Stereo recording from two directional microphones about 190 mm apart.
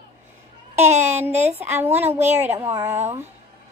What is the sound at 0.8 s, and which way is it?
Speech, 35° right (ahead or behind).